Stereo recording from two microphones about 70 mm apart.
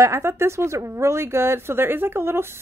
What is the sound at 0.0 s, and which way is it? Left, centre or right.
Speech, right.